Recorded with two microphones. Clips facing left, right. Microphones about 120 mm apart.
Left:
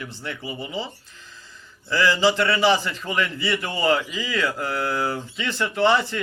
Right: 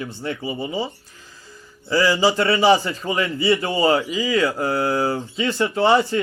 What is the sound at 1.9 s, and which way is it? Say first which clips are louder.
A man's voice: right 2 dB; 15° right (ahead or behind).